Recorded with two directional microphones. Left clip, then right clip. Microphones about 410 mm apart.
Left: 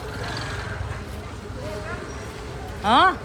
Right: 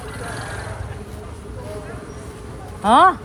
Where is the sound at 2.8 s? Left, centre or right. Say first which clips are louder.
Right 5 dB; centre.